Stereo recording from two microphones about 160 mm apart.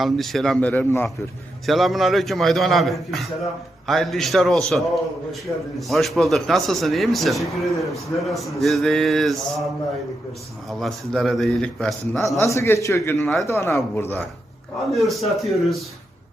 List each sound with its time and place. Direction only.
0.0 s a man's voice: centre (ahead or behind)
1.6 s a man's voice: centre (ahead or behind)
5.9 s a man's voice: centre (ahead or behind)
10.7 s a man's voice: centre (ahead or behind)
12.4 s a man's voice: 15° left (ahead or behind)
13.1 s a man's voice: centre (ahead or behind)
13.5 s a man's voice: 15° left (ahead or behind)
14.9 s a man's voice: centre (ahead or behind)